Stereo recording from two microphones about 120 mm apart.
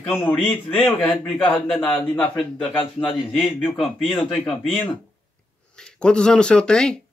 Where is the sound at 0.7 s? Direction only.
15° left (ahead or behind).